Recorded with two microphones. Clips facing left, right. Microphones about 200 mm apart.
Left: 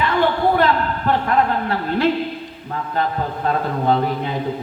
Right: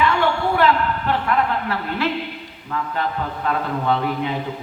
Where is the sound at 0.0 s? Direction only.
35° left (ahead or behind).